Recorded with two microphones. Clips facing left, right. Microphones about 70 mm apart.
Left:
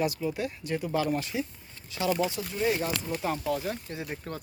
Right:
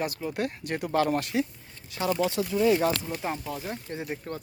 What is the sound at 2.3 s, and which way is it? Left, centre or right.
Speech, right.